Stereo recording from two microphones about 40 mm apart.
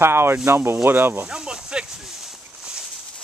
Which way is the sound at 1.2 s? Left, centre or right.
Centre.